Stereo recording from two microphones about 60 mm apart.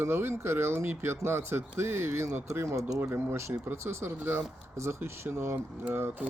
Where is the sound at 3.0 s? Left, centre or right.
Right.